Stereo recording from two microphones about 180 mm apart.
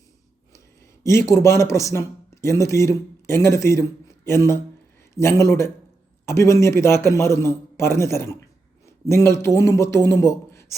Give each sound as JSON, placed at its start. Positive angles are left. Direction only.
{"t": 1.0, "sound": "a man's voice", "side_deg": 15}